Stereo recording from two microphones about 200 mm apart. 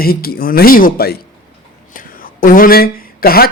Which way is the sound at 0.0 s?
50° left (ahead or behind).